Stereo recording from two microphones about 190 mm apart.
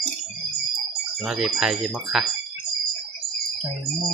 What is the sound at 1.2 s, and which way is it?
Speech, 5° right (ahead or behind).